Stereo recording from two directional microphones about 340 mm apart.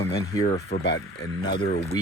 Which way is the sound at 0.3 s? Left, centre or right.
Centre.